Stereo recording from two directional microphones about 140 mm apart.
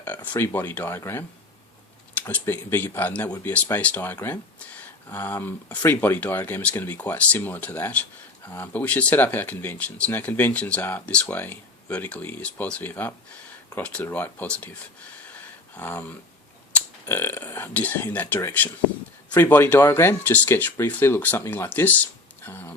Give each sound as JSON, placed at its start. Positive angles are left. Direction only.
{"t": 0.0, "sound": "speech", "side_deg": 15}
{"t": 2.2, "sound": "speech", "side_deg": 15}
{"t": 15.8, "sound": "speech", "side_deg": 15}